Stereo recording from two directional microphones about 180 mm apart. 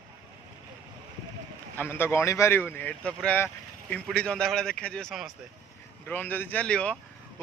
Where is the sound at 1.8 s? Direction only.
10° left (ahead or behind).